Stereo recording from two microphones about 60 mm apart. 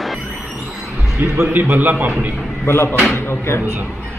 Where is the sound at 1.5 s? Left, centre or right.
Right.